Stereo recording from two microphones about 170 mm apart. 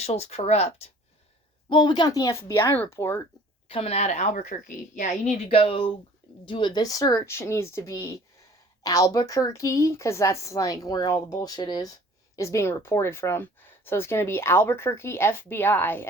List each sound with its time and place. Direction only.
0.0 s speech: 40° left (ahead or behind)
1.7 s speech: 25° left (ahead or behind)
3.7 s a woman's voice: 35° left (ahead or behind); by 16.0 s 10° left (ahead or behind)